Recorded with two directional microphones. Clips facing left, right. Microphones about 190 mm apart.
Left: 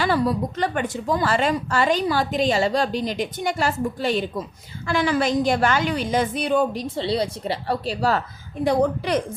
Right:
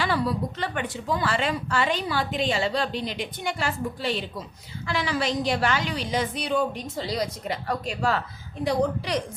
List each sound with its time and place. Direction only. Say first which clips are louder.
0.0 s a woman's voice: left 4 dB; 45° left (ahead or behind)
6.8 s a woman's voice: left 5 dB; 30° left (ahead or behind)
8.6 s a woman's voice: left 4 dB; 50° left (ahead or behind)